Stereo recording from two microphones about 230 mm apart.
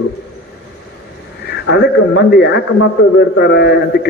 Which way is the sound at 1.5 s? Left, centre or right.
Left.